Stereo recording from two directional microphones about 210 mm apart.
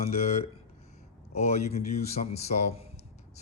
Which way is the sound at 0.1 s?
30° left (ahead or behind).